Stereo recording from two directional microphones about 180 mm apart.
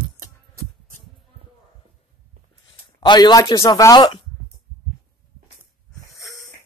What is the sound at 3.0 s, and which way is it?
Speech, 25° left (ahead or behind).